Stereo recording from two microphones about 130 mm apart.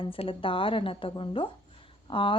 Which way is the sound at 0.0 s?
45° left (ahead or behind).